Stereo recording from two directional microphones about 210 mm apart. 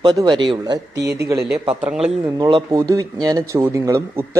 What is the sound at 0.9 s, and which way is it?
Speech, 50° right (ahead or behind).